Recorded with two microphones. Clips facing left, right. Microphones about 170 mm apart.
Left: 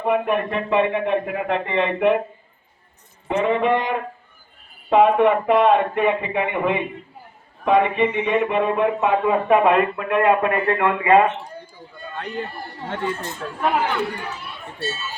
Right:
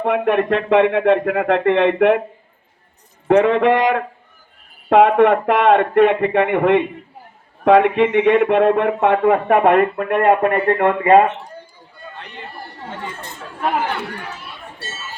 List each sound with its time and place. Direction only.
0.0 s speech: 90° right
3.2 s speech: 85° right; by 11.2 s 45° right (ahead or behind)